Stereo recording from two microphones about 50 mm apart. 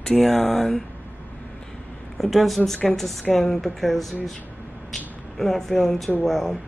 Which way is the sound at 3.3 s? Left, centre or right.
Centre.